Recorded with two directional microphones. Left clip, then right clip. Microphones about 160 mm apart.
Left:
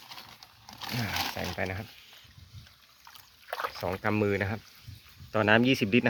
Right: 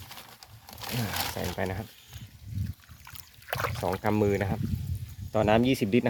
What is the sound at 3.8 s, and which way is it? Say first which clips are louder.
Speech: right 2 dB; 10° right (ahead or behind).